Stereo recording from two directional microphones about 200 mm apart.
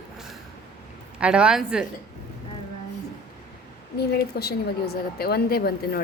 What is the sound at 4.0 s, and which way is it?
A woman's voice, 50° left (ahead or behind).